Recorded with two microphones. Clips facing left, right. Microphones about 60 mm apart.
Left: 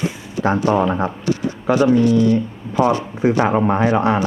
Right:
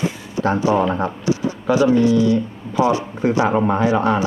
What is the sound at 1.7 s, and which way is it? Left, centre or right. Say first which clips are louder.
Speech: left 1 dB; left.